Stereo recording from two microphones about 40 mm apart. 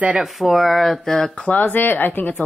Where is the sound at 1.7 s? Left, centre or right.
Left.